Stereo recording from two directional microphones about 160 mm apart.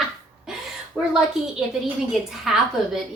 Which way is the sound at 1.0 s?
5° right (ahead or behind).